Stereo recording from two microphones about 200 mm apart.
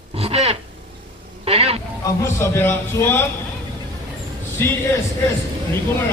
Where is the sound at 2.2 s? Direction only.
15° left (ahead or behind).